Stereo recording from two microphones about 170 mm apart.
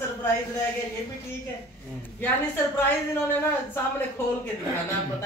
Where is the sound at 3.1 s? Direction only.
10° left (ahead or behind).